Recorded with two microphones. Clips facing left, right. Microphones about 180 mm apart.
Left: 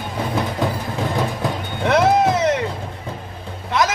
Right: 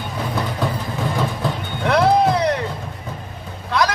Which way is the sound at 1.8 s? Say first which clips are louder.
Even; 20° left (ahead or behind).